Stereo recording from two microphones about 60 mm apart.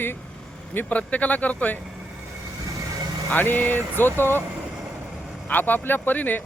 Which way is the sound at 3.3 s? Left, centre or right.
Left.